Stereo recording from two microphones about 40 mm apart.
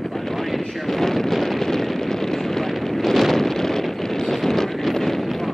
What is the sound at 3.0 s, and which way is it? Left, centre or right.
Wind noise, centre.